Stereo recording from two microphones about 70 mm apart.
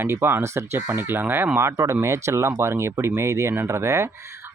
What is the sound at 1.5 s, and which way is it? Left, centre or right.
Speech, right.